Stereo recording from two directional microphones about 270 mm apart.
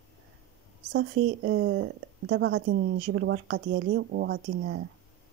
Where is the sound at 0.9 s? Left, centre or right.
Right.